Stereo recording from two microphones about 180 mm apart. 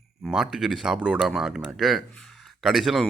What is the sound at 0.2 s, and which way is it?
Speech, centre (ahead or behind).